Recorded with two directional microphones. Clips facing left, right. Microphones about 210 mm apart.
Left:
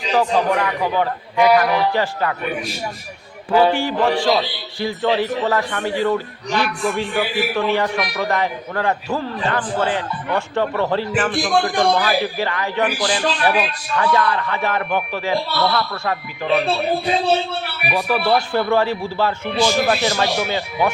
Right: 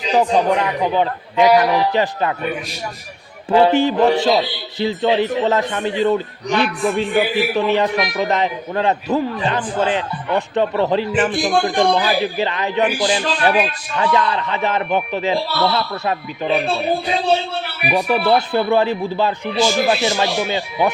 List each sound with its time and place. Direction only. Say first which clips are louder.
0.1 s a man's voice: right 2 dB; 20° right (ahead or behind)
3.5 s a man's voice: right 3 dB; 25° right (ahead or behind)
17.9 s a man's voice: right 2 dB; 20° right (ahead or behind)